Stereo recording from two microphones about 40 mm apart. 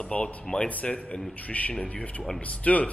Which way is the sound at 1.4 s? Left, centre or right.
Left.